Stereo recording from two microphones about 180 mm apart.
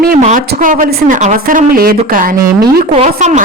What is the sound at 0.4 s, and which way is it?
A woman's voice, 55° right (ahead or behind).